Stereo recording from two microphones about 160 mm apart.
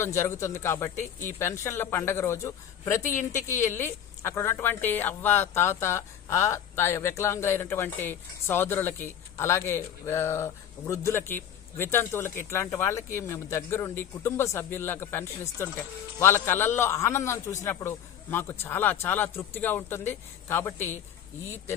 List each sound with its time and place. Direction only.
0.0 s a woman's voice: 15° left (ahead or behind)